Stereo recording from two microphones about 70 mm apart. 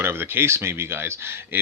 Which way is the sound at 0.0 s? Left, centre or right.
Right.